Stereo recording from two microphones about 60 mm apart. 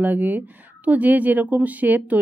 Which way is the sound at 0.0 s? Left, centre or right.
Right.